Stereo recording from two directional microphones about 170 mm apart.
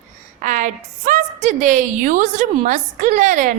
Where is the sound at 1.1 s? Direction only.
50° right (ahead or behind).